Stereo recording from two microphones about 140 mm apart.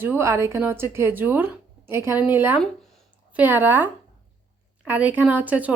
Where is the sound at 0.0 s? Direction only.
15° right (ahead or behind).